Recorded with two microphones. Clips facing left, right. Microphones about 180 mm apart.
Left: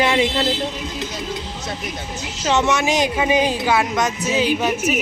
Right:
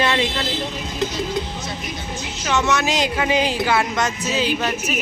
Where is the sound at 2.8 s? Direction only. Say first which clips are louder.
Left 2 dB; 20° left (ahead or behind).